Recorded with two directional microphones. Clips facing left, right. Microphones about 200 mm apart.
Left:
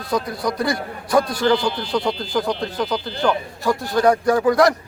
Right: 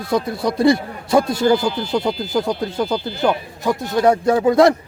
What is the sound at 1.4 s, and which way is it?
Speech, 5° right (ahead or behind).